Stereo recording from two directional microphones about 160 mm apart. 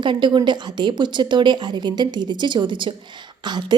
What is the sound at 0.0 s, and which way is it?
A woman's voice, 30° right (ahead or behind).